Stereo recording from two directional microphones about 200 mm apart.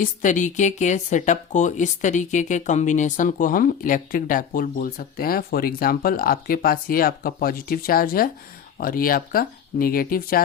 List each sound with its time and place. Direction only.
0.0 s speech: 40° left (ahead or behind)